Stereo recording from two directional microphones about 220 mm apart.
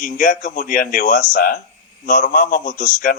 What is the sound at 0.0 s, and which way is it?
A man's voice, 40° left (ahead or behind).